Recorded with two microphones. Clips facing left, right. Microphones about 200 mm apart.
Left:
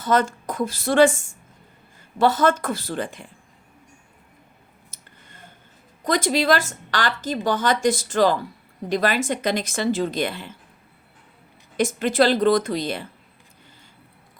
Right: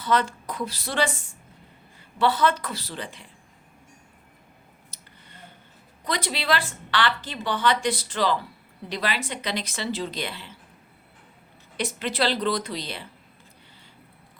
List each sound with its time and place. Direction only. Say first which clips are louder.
0.0 s a woman's voice: left 4 dB; 45° left (ahead or behind)
4.9 s a sound: left 1 dB; 50° left (ahead or behind)
6.1 s a woman's voice: left 7 dB; 45° left (ahead or behind)
11.8 s a woman's voice: left 7 dB; 45° left (ahead or behind)